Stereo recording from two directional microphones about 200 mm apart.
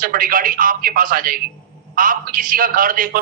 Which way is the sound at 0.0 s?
45° right (ahead or behind).